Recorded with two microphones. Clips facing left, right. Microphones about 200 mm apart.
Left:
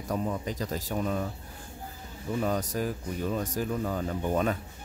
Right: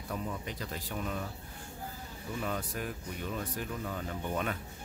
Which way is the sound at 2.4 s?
40° left (ahead or behind).